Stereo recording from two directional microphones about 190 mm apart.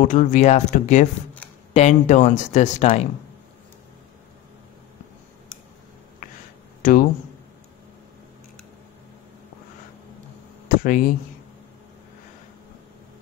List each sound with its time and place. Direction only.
0.0 s speech: 40° left (ahead or behind)
6.8 s speech: 45° left (ahead or behind)
10.7 s speech: 45° left (ahead or behind)